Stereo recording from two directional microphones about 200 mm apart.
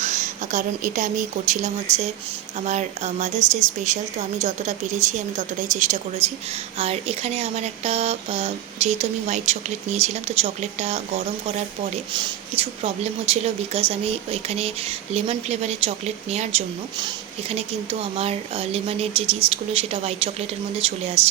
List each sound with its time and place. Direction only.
0.0 s speech: 35° right (ahead or behind)
12.1 s speech: 25° right (ahead or behind)